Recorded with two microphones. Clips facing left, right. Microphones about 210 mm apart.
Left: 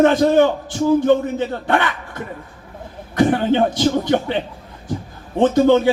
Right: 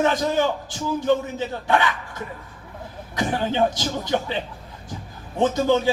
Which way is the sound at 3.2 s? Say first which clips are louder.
Left 7 dB; 55° left (ahead or behind).